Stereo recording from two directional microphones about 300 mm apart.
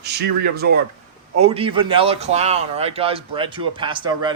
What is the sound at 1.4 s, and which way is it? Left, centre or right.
Speech, centre.